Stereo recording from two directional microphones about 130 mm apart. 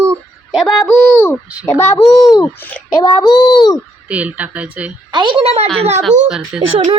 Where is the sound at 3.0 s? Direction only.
35° left (ahead or behind).